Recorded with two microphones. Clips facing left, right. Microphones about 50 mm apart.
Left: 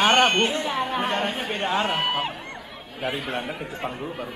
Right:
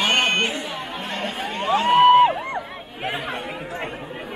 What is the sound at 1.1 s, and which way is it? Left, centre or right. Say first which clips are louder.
Chatter: left 1 dB; centre.